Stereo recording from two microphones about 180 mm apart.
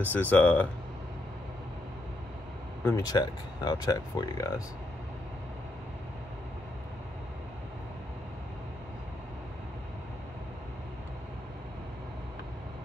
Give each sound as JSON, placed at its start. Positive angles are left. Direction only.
{"t": 0.0, "sound": "speech", "side_deg": 10}
{"t": 2.8, "sound": "speech", "side_deg": 15}